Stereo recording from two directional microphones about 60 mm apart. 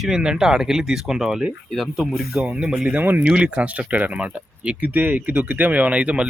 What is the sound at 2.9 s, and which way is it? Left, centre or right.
Speech, right.